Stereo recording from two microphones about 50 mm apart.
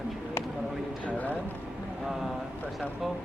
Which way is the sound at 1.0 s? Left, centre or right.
Left.